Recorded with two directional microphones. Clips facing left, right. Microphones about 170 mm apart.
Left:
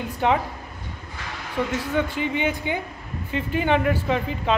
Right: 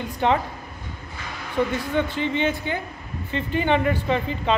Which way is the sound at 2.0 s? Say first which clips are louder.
Right 1 dB; 10° left (ahead or behind).